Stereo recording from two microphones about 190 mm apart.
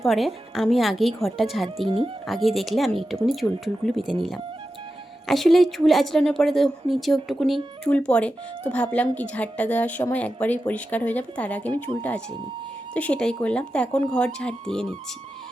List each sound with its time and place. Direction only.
0.0 s speech: centre (ahead or behind)
1.8 s speech: 25° right (ahead or behind)
2.2 s speech: centre (ahead or behind)
5.3 s a woman's voice: centre (ahead or behind)